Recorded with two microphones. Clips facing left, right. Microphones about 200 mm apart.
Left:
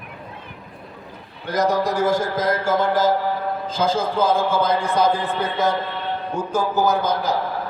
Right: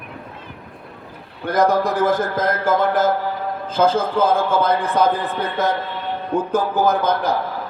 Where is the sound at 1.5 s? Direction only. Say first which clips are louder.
Right 3 dB; 55° right (ahead or behind).